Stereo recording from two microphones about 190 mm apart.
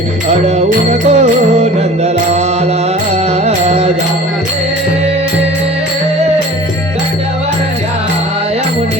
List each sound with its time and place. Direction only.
0.3 s music: 35° right (ahead or behind)
3.4 s music: 35° right (ahead or behind)